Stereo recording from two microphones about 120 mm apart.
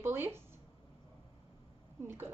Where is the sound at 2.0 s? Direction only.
20° right (ahead or behind).